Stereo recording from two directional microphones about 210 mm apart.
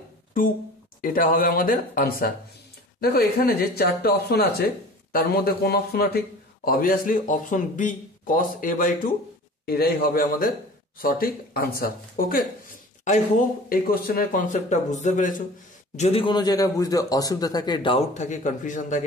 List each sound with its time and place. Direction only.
1.0 s a man's voice: 40° left (ahead or behind)
13.7 s a man's voice: 45° left (ahead or behind)
16.0 s a man's voice: 25° left (ahead or behind)